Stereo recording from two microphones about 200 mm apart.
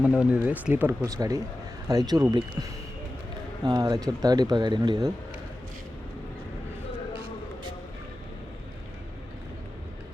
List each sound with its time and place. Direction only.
0.0 s speech: 5° right (ahead or behind)